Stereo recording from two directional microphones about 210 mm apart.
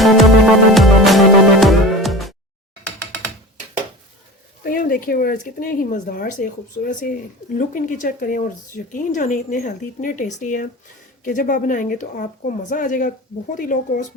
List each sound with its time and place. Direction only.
0.0 s music: centre (ahead or behind)
4.6 s speech: 45° left (ahead or behind)